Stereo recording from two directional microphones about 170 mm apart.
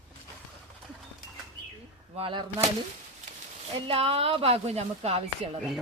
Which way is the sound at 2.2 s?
30° right (ahead or behind).